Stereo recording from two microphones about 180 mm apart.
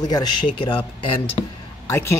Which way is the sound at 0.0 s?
20° left (ahead or behind).